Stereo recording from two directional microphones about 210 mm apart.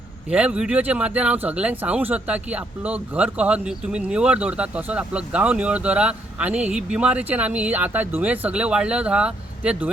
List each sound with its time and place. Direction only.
0.3 s speech: 5° right (ahead or behind)